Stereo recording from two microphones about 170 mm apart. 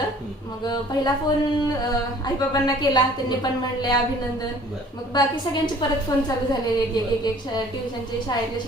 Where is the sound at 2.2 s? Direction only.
25° left (ahead or behind).